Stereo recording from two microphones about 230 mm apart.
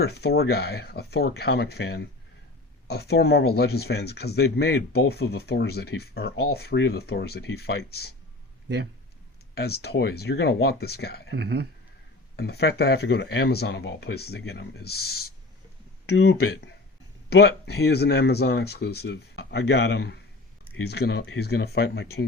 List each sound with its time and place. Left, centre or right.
0.0 s speech: left
9.6 s speech: left
11.3 s speech: right
12.4 s speech: left